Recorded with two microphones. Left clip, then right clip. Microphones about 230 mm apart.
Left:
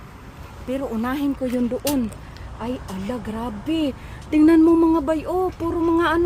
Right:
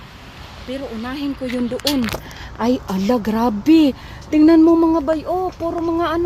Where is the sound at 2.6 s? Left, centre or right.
Right.